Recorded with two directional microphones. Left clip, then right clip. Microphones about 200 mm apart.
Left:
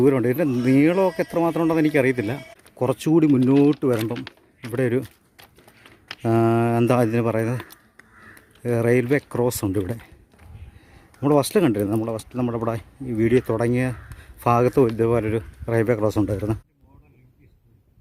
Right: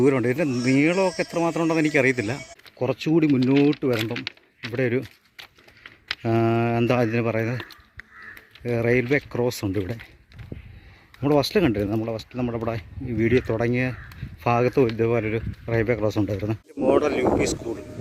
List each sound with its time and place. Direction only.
0.0 s speech: 10° left (ahead or behind)
2.7 s speech: 20° left (ahead or behind)
4.1 s speech: 5° left (ahead or behind)
6.2 s speech: 15° left (ahead or behind)
11.2 s speech: 10° left (ahead or behind)